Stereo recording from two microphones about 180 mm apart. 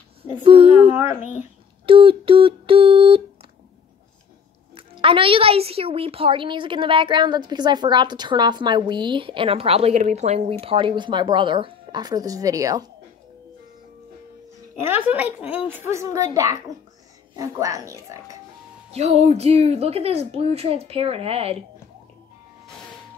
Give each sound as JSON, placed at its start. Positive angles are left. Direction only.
{"t": 0.2, "sound": "a woman's voice", "side_deg": -30}
{"t": 1.9, "sound": "a woman's voice", "side_deg": -30}
{"t": 4.7, "sound": "a woman's voice", "side_deg": -30}
{"t": 14.8, "sound": "speech", "side_deg": -10}
{"t": 17.4, "sound": "speech", "side_deg": -20}
{"t": 18.9, "sound": "speech", "side_deg": -35}